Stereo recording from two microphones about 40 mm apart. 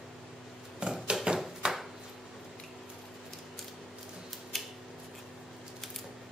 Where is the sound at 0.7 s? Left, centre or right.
Right.